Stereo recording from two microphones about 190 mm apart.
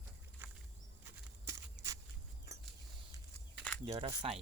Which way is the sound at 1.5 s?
15° right (ahead or behind).